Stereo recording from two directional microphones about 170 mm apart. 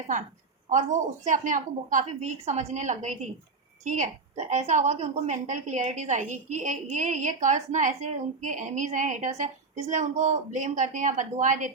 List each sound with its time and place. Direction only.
0.7 s a woman's voice: 45° right (ahead or behind)